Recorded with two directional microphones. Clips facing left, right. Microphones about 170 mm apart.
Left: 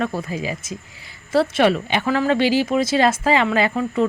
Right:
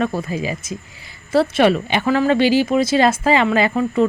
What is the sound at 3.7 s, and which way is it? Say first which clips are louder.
Speech: right 3 dB; 30° right (ahead or behind).